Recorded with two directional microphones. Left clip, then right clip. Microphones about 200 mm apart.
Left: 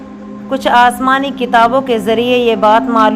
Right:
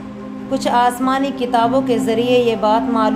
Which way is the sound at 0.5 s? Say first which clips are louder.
Left 6 dB; 20° left (ahead or behind).